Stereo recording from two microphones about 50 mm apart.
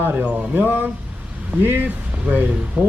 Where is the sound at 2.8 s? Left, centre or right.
Centre.